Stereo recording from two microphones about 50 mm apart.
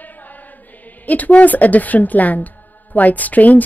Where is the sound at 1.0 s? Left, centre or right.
Left.